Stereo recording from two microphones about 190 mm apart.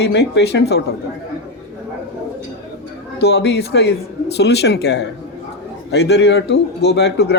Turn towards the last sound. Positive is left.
turn(degrees=60)  # may be behind; listen again after turning